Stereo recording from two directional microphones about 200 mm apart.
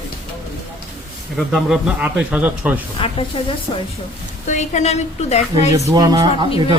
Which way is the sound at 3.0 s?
25° left (ahead or behind).